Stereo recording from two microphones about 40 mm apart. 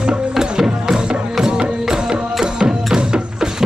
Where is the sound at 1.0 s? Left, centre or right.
Right.